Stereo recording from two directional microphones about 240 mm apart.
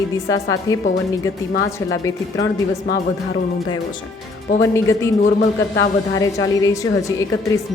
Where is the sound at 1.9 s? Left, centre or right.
Centre.